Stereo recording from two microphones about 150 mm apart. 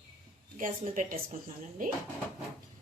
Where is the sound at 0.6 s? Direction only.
65° right (ahead or behind).